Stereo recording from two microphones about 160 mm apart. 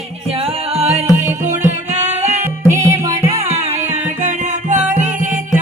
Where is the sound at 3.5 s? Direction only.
45° right (ahead or behind).